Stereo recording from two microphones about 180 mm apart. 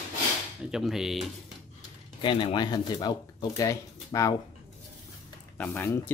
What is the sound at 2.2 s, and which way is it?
Speech, 25° left (ahead or behind).